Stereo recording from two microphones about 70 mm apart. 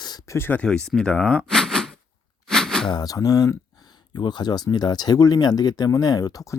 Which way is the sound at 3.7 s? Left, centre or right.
Left.